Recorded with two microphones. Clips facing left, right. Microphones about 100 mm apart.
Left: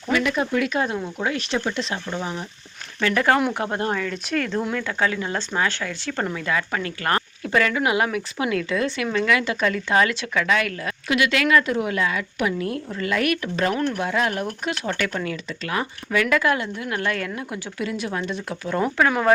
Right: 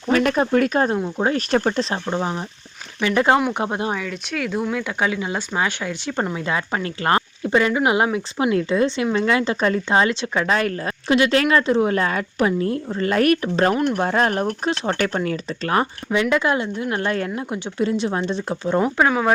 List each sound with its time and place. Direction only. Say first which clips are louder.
0.1 s speech: right 4 dB; 45° right (ahead or behind)
3.0 s a woman's voice: right 2 dB; 20° right (ahead or behind); by 14.4 s 40° right (ahead or behind)
14.6 s a woman's voice: right 4 dB; 30° right (ahead or behind)
16.3 s a woman's voice: right 1 dB; 25° right (ahead or behind)